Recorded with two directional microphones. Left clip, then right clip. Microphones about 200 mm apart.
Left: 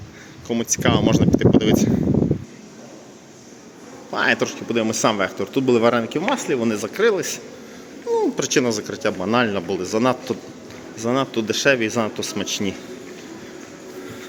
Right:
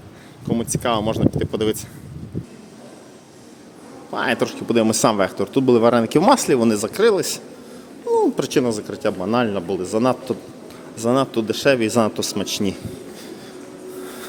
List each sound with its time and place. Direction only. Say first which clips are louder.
0.4 s speech: left 1 dB; 10° right (ahead or behind)
4.1 s speech: left 1 dB; 5° right (ahead or behind)